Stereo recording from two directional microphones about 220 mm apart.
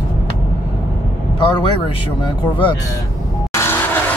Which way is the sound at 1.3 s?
20° left (ahead or behind).